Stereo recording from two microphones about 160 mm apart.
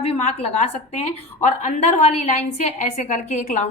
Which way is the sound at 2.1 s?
45° left (ahead or behind).